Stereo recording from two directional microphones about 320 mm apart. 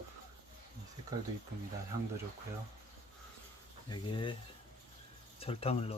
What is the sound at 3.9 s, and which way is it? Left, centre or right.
Speech, centre.